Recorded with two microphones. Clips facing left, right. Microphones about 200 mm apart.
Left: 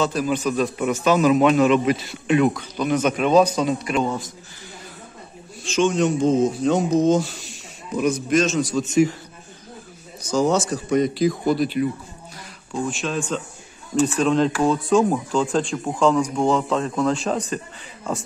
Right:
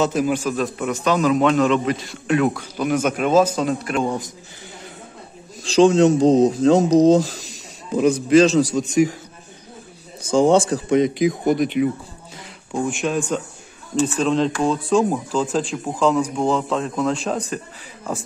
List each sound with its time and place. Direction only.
0.0 s speech: 20° right (ahead or behind); by 2.6 s centre (ahead or behind)
2.8 s speech: 10° right (ahead or behind)
6.1 s a man's voice: 35° right (ahead or behind)
8.7 s speech: 10° right (ahead or behind)
10.2 s speech: 30° right (ahead or behind)
11.1 s speech: 20° right (ahead or behind)
12.8 s speech: 15° right (ahead or behind)
13.9 s speech: centre (ahead or behind)